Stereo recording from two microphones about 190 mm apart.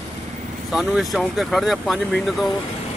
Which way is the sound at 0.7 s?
Centre (ahead or behind).